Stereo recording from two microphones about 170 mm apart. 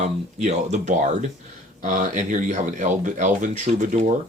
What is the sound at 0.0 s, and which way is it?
Speech, 40° right (ahead or behind).